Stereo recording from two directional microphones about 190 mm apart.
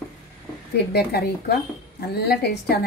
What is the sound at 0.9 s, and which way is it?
Speech, 55° left (ahead or behind).